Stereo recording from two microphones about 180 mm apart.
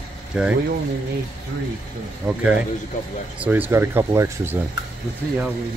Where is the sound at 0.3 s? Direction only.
5° right (ahead or behind).